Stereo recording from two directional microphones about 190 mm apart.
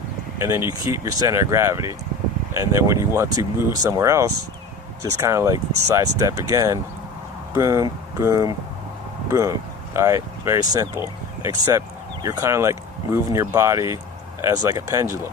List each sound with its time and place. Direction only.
0.3 s speech: 15° right (ahead or behind)